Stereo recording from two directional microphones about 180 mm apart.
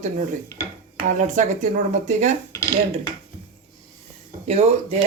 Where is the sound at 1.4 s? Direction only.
45° right (ahead or behind).